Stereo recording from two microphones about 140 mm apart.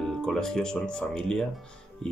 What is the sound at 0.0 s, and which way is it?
Speech, 5° left (ahead or behind).